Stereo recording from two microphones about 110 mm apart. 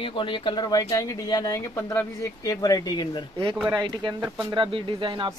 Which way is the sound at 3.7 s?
40° right (ahead or behind).